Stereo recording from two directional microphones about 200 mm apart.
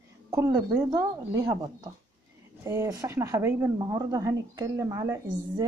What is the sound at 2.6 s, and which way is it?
Speech, 15° right (ahead or behind).